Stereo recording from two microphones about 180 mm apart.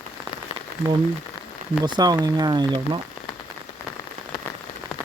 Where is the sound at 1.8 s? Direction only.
25° right (ahead or behind).